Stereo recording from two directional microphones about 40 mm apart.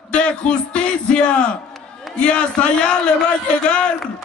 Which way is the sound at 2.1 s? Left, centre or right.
Left.